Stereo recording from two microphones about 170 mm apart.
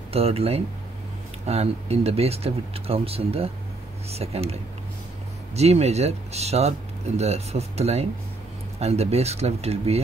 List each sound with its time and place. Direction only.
0.1 s speech: 35° right (ahead or behind)
5.6 s speech: 40° right (ahead or behind)